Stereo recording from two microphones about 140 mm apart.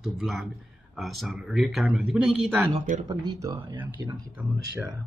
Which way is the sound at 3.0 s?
25° right (ahead or behind).